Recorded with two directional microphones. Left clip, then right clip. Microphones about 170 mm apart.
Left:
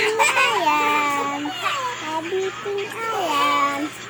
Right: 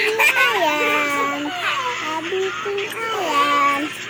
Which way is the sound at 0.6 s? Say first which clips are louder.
Even; 15° left (ahead or behind).